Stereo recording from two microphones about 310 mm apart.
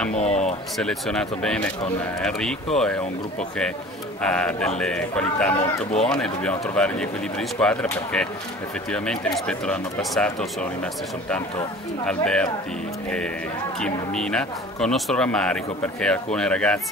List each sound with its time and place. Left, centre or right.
0.1 s speech: left
0.7 s speech: centre
13.7 s speech: centre